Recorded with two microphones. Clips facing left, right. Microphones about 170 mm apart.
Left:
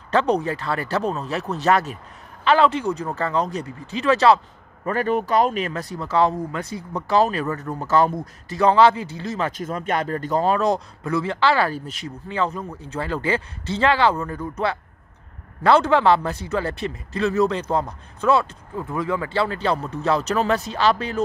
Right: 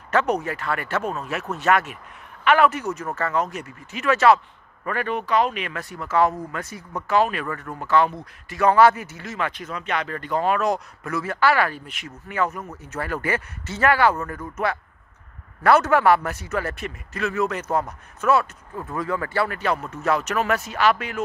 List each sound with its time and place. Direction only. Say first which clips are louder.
0.1 s speech: left 2 dB; 30° left (ahead or behind)
15.6 s speech: left 1 dB; 25° left (ahead or behind)
18.8 s speech: left 2 dB; 15° left (ahead or behind); by 21.2 s 30° left (ahead or behind)